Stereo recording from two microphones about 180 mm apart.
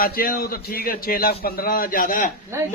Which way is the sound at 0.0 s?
55° left (ahead or behind).